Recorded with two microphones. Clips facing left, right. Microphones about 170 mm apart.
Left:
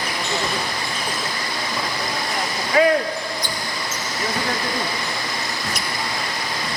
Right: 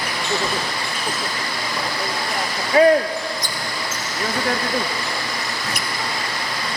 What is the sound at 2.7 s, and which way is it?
Speech, 35° right (ahead or behind).